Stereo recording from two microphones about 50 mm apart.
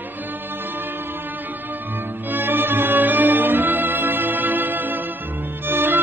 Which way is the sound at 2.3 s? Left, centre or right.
Right.